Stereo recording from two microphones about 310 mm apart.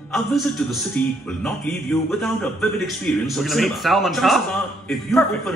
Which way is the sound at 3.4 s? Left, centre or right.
Centre.